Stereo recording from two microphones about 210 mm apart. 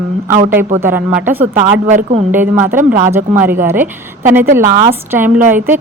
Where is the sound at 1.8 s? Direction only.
30° right (ahead or behind).